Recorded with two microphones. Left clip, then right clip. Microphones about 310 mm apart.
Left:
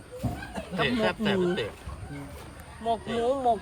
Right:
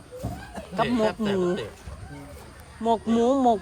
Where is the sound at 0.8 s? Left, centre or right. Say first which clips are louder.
Right 1 dB; centre.